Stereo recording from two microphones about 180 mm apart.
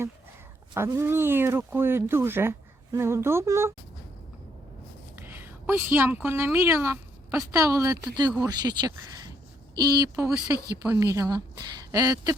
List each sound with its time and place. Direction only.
0.7 s speech: 15° right (ahead or behind)
5.1 s a woman's voice: 10° right (ahead or behind)